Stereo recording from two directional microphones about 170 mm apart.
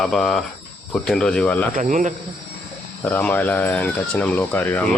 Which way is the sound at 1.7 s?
50° right (ahead or behind).